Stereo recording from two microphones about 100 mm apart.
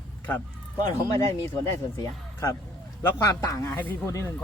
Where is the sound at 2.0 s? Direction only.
35° left (ahead or behind).